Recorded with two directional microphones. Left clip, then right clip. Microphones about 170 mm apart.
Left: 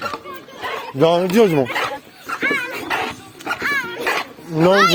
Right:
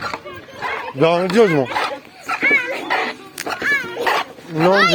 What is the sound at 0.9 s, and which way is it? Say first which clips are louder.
Speech: even; 90° left.